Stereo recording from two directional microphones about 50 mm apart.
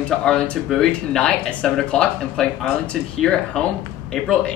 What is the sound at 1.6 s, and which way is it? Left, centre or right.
A man's voice, centre.